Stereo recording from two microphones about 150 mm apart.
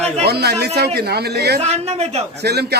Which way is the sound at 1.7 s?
45° right (ahead or behind).